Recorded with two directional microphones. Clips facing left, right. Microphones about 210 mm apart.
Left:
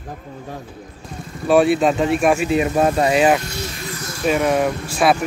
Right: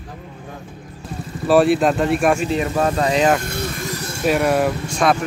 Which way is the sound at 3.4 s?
55° right (ahead or behind).